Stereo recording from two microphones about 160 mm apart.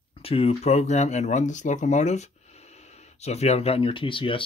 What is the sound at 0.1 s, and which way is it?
Speech, 35° left (ahead or behind).